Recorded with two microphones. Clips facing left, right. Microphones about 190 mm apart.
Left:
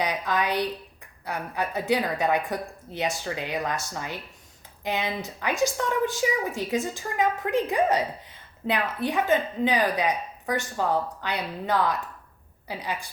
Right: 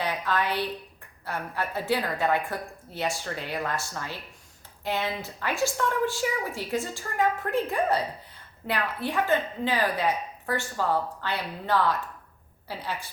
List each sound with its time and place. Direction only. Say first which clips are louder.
0.0 s a woman's voice: left 2 dB; 15° left (ahead or behind)